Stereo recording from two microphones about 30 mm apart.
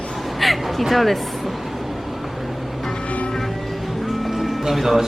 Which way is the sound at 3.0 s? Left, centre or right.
Left.